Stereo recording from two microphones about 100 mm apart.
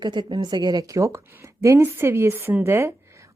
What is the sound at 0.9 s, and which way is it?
A woman's voice, 30° right (ahead or behind).